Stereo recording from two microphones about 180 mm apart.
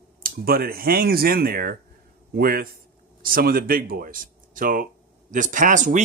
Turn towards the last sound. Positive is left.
turn(degrees=-45)  # may be behind; listen again after turning